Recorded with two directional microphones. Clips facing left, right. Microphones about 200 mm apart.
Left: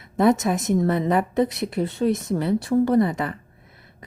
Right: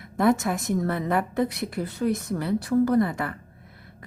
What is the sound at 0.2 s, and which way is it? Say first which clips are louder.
A woman's voice: left 3 dB; 20° left (ahead or behind).